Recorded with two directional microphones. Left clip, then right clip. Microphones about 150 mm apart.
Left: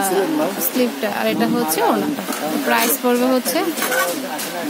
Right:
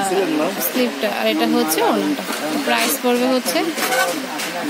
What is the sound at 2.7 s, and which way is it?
Speech, 10° left (ahead or behind).